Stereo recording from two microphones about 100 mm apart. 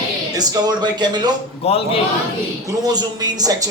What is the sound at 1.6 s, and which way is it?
Speech, 80° left.